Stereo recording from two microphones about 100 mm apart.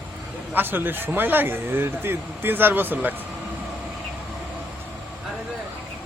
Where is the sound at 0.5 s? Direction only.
20° right (ahead or behind).